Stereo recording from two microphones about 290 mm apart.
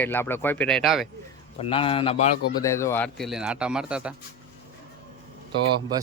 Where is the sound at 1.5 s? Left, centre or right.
Centre.